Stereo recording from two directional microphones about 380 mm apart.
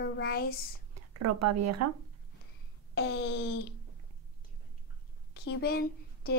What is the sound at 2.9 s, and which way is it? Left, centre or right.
Speech, left.